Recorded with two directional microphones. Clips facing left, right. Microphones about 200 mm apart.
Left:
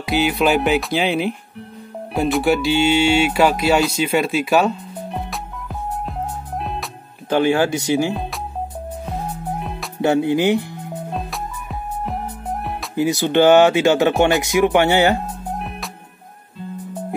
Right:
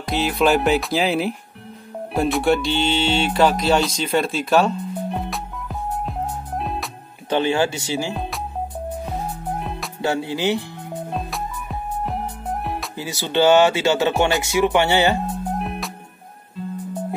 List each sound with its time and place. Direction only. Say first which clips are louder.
0.0 s speech: left 2 dB; 5° left (ahead or behind)
2.1 s music: left 1 dB; centre (ahead or behind)
7.3 s speech: left 3 dB; 15° left (ahead or behind)
8.1 s speech: left 2 dB; centre (ahead or behind)
9.6 s music: even; centre (ahead or behind)
10.0 s speech: left 6 dB; 20° left (ahead or behind)
11.1 s music: even; centre (ahead or behind)
12.9 s speech: left 7 dB; 15° left (ahead or behind)
15.4 s music: right 2 dB; centre (ahead or behind)